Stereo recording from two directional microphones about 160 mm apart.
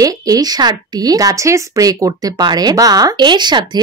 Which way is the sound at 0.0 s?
25° right (ahead or behind).